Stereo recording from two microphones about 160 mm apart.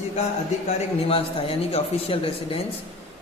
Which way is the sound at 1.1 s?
35° left (ahead or behind).